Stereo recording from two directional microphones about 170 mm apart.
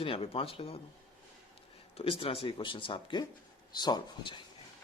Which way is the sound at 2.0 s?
35° left (ahead or behind).